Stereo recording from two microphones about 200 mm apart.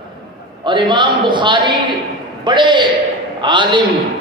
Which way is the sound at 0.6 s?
25° right (ahead or behind).